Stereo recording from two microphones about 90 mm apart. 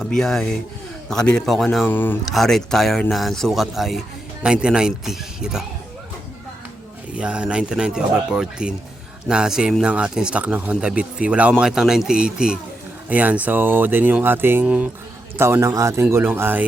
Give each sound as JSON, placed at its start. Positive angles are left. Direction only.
{"t": 0.0, "sound": "a man's voice", "side_deg": 5}
{"t": 1.8, "sound": "speech", "side_deg": 20}
{"t": 2.3, "sound": "a man's voice", "side_deg": 5}
{"t": 7.2, "sound": "speech", "side_deg": -10}